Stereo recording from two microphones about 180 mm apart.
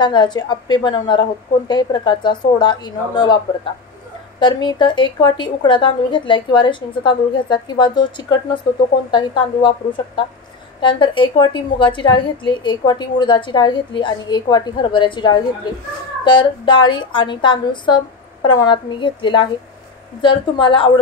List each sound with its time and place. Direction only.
0.0 s a woman's voice: 25° left (ahead or behind)
4.4 s a woman's voice: 25° left (ahead or behind)